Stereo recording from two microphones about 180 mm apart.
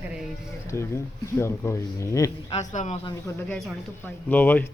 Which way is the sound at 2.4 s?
40° left (ahead or behind).